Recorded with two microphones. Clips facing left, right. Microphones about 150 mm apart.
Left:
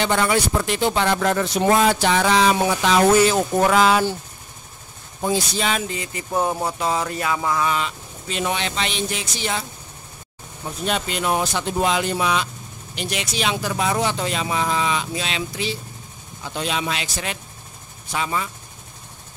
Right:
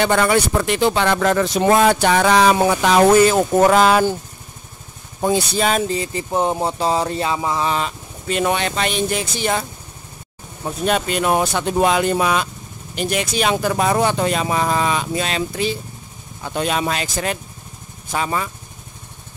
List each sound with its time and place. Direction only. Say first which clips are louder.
0.0 s speech: right 4 dB; 55° right (ahead or behind); by 1.9 s 90° right
1.9 s speech: right 3 dB; 55° right (ahead or behind)
5.2 s speech: right 4 dB; 50° right (ahead or behind); by 7.7 s 25° right (ahead or behind)
8.3 s speech: right 5 dB; 55° right (ahead or behind)
10.9 s speech: right 4 dB; 50° right (ahead or behind)